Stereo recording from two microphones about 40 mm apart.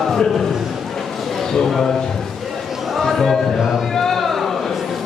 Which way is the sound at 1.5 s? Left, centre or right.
Centre.